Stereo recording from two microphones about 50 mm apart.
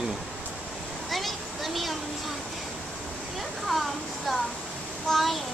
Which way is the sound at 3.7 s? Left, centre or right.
Centre.